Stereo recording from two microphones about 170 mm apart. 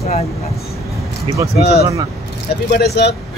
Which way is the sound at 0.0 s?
40° left (ahead or behind).